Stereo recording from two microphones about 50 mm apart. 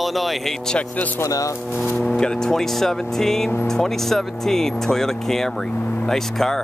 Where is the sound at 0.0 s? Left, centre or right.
Centre.